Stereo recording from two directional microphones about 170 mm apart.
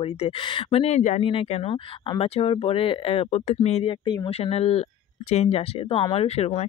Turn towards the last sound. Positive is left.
turn(degrees=35)  # may be behind; listen again after turning